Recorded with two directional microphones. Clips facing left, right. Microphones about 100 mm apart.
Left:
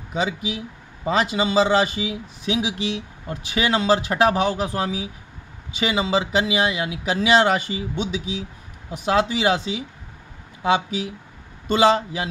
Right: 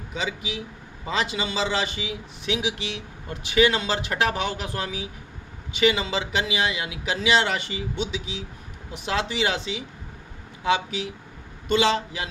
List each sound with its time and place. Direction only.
1.0 s speech: 40° left (ahead or behind)
10.6 s speech: 40° left (ahead or behind)